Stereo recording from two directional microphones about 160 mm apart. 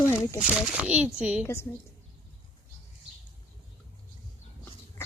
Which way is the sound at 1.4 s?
15° left (ahead or behind).